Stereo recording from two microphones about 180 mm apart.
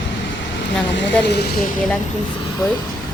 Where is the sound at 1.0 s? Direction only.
70° left (ahead or behind).